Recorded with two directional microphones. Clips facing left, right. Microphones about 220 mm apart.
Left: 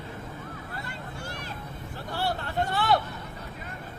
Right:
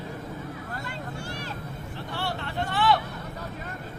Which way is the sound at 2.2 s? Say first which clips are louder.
Left 3 dB; 40° left (ahead or behind).